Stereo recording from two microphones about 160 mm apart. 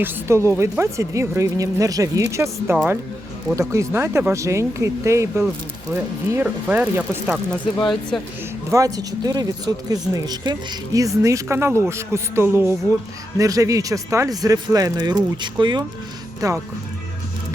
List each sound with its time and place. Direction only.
0.0 s speech: 15° right (ahead or behind)
8.1 s speech: centre (ahead or behind)
8.7 s speech: 20° right (ahead or behind)